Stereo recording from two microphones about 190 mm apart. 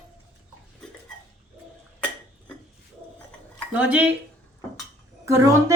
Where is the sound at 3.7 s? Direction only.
5° right (ahead or behind).